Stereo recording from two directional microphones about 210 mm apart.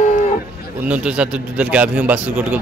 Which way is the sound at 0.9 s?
5° right (ahead or behind).